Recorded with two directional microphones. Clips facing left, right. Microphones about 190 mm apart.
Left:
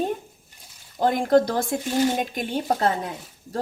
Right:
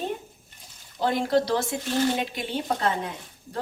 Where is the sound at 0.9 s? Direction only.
50° left (ahead or behind).